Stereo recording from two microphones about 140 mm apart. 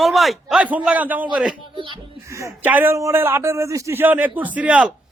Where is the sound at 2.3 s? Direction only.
20° right (ahead or behind).